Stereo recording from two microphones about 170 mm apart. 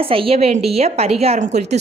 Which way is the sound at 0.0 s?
35° right (ahead or behind).